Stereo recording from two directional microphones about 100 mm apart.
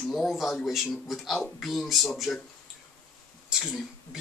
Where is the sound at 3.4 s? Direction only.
5° right (ahead or behind).